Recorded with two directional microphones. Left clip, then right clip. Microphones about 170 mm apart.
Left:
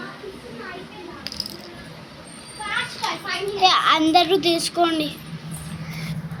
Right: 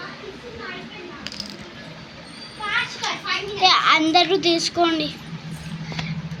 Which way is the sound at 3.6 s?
Centre (ahead or behind).